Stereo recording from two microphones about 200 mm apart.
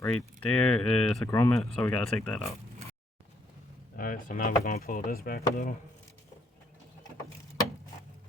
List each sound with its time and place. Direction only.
0.0 s speech: 10° left (ahead or behind)
3.9 s speech: 45° left (ahead or behind)